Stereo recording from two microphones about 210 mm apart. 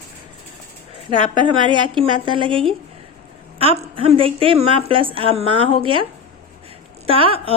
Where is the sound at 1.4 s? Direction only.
20° right (ahead or behind).